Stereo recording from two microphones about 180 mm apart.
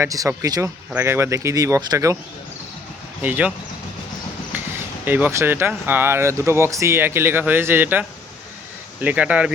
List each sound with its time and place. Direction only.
0.0 s speech: 15° right (ahead or behind)
3.2 s speech: 10° right (ahead or behind)
4.5 s speech: 10° right (ahead or behind)